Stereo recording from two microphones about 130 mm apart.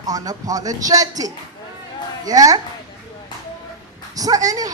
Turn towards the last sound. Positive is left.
turn(degrees=-30)  # may be behind; listen again after turning